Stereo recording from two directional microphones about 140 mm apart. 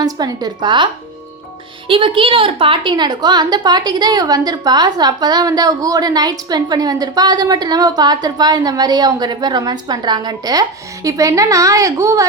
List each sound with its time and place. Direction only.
0.0 s a woman's voice: 30° right (ahead or behind)
1.9 s a woman's voice: 40° right (ahead or behind); by 12.2 s 20° right (ahead or behind)